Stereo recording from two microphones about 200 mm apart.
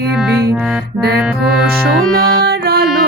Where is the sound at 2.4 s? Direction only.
50° right (ahead or behind).